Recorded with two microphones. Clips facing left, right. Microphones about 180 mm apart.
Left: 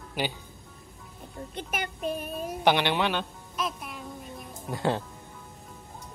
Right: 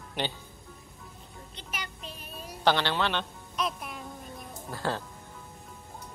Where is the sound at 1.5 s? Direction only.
50° left (ahead or behind).